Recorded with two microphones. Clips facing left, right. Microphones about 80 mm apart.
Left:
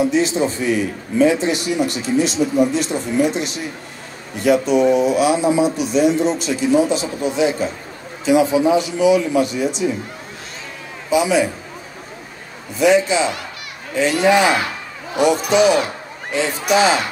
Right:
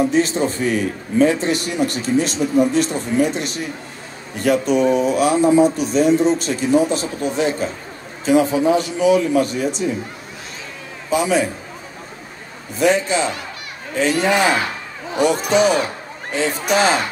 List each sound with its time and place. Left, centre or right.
0.1 s a man's voice: right
11.1 s a man's voice: right
12.7 s a man's voice: right